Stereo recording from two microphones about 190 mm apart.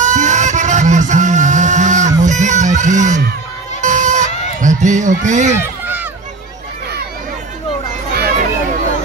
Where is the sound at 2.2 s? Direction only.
40° right (ahead or behind).